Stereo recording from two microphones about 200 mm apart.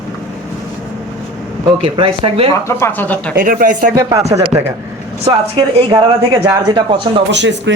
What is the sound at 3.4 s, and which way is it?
Speech, 45° right (ahead or behind).